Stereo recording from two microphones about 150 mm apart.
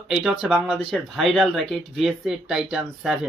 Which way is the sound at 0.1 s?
5° right (ahead or behind).